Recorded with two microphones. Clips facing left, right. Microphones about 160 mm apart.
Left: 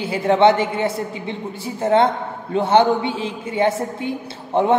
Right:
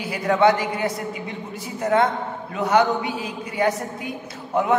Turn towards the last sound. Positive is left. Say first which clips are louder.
# left 4 dB
turn(degrees=30)  # may be behind; listen again after turning